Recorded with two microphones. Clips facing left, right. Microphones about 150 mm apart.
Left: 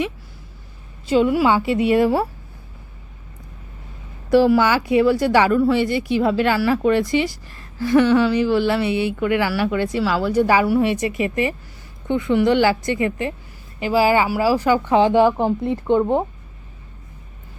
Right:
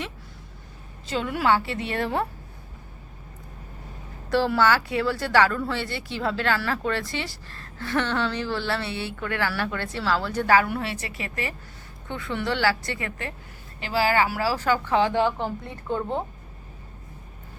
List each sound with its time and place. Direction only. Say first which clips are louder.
1.0 s a woman's voice: left 8 dB; 10° left (ahead or behind)
4.3 s a woman's voice: left 7 dB; 10° left (ahead or behind)